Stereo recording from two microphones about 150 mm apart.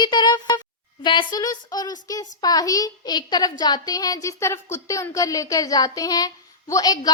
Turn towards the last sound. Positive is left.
turn(degrees=25)  # may be behind; listen again after turning